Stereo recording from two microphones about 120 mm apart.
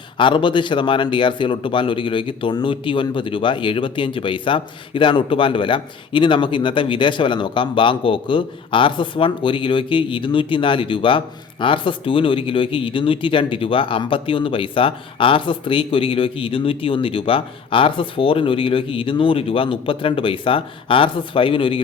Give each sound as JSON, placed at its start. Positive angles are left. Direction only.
{"t": 0.2, "sound": "speech", "side_deg": 45}